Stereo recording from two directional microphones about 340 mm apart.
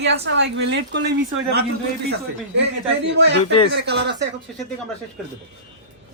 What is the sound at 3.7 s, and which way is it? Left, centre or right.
Speech, right.